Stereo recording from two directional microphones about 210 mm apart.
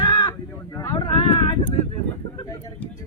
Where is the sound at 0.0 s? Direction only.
20° left (ahead or behind).